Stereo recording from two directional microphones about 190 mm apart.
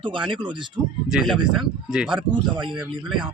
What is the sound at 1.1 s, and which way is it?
Speech, centre (ahead or behind).